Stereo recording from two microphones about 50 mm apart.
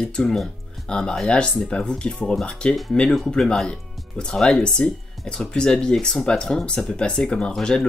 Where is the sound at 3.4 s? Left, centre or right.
Centre.